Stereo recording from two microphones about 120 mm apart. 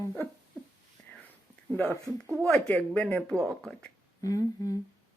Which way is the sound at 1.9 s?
20° right (ahead or behind).